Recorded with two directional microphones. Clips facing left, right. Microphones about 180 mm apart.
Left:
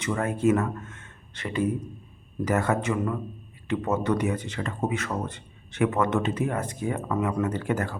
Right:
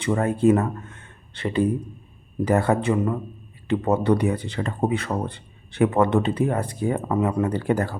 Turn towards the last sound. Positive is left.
turn(degrees=-35)  # may be behind; listen again after turning